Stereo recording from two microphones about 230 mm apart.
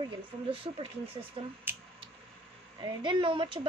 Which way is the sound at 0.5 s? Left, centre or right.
Right.